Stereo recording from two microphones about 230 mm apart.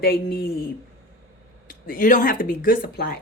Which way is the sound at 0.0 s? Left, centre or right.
Left.